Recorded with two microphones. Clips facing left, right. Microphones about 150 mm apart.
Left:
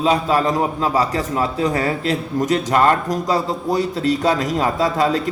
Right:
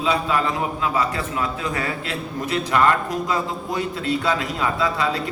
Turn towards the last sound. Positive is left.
turn(degrees=40)  # may be behind; listen again after turning